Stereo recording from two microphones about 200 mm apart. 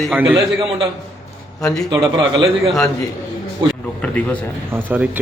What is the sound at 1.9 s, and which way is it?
Speech, 20° right (ahead or behind).